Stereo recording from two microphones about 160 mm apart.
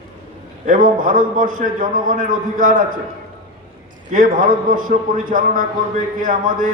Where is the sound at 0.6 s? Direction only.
55° right (ahead or behind).